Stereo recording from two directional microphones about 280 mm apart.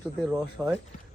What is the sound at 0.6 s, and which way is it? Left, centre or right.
Speech, centre.